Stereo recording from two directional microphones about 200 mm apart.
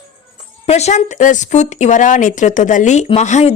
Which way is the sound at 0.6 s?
35° left (ahead or behind).